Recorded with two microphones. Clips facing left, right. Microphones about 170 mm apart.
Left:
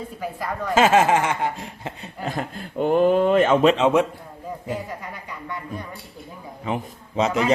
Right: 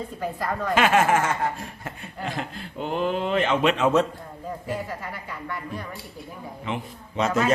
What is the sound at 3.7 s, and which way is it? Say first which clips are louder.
Speech: left 4 dB; 25° left (ahead or behind).